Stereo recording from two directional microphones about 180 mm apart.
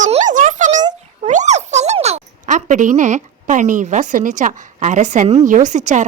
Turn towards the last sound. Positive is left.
turn(degrees=-40)  # may be behind; listen again after turning